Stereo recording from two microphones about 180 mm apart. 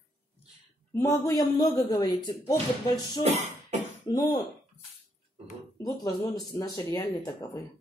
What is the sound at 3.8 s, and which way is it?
Throat clearing, 20° left (ahead or behind).